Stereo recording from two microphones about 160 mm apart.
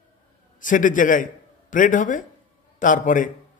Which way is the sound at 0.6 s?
55° left (ahead or behind).